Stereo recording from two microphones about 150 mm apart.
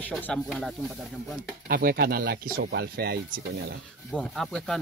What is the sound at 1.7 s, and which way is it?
Speech, 85° right.